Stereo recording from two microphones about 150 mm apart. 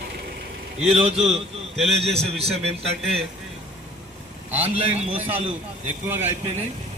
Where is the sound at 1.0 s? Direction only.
40° right (ahead or behind).